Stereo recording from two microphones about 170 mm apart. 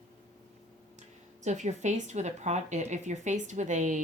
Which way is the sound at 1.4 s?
45° right (ahead or behind).